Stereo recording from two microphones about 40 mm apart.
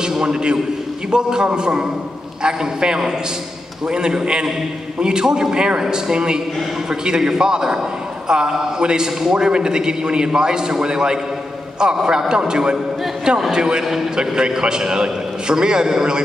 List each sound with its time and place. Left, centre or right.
0.2 s a man's voice: right